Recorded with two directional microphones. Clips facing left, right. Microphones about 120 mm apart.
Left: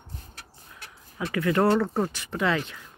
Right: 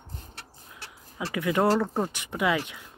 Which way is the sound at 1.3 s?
15° right (ahead or behind).